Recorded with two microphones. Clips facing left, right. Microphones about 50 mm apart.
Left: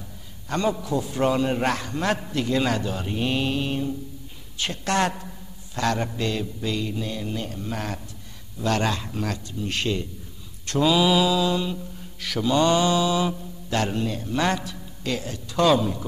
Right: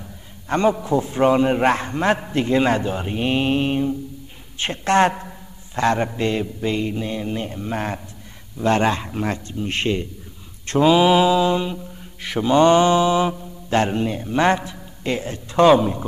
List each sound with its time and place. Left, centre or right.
0.5 s mantra: right
4.6 s a woman's voice: right
5.8 s mantra: right